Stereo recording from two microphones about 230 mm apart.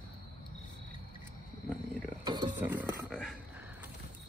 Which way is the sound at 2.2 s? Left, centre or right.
Centre.